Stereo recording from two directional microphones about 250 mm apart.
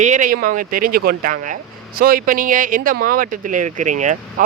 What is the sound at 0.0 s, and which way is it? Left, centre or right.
Speech, right.